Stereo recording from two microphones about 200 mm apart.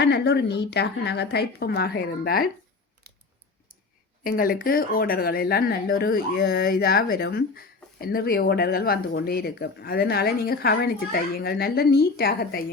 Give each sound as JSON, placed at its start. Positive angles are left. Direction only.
{"t": 0.0, "sound": "speech", "side_deg": 60}
{"t": 3.1, "sound": "a sound", "side_deg": -50}
{"t": 4.2, "sound": "speech", "side_deg": 45}